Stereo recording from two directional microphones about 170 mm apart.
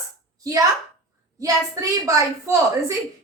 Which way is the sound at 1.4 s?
20° right (ahead or behind).